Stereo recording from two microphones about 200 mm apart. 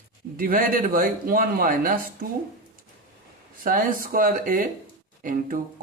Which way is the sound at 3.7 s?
45° right (ahead or behind).